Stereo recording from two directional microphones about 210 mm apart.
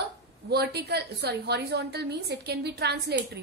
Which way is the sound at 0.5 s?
50° right (ahead or behind).